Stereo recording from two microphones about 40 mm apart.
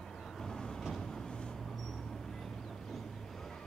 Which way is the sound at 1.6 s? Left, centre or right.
Centre.